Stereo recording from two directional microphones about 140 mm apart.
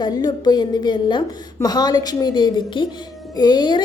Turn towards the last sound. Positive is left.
turn(degrees=30)  # may be behind; listen again after turning